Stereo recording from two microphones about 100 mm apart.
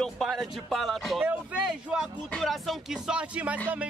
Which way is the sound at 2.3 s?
Centre (ahead or behind).